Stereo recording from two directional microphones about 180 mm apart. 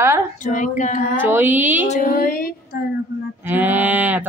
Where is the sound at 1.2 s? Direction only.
10° right (ahead or behind).